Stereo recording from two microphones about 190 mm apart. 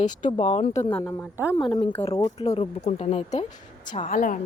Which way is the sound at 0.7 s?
15° left (ahead or behind).